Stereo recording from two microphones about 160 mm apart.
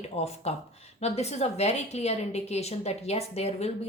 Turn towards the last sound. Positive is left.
turn(degrees=40)  # may be behind; listen again after turning